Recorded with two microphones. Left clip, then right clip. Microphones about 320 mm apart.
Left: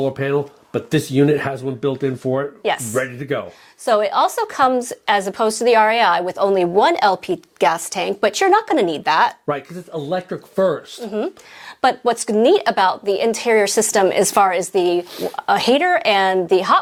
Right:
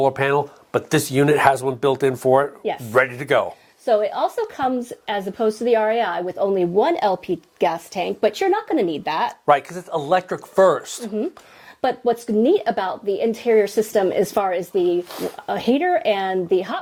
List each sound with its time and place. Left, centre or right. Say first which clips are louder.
0.0 s speech: right 2 dB; right
2.9 s speech: right 4 dB; right
3.8 s a woman's voice: left 3 dB; left
9.5 s speech: right 7 dB; right
11.2 s a woman's voice: left 3 dB; left